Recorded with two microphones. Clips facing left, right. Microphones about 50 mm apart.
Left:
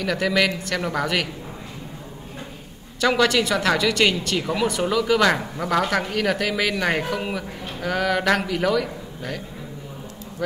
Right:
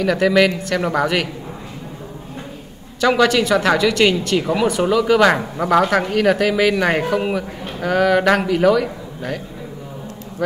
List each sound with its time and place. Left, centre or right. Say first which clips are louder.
0.0 s speech: right 6 dB; centre
3.0 s speech: right 4 dB; centre